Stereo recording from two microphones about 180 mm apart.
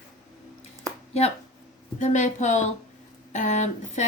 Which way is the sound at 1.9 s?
40° left (ahead or behind).